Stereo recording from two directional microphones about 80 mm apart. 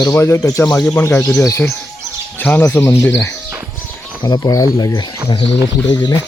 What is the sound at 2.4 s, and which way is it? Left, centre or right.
Speech, left.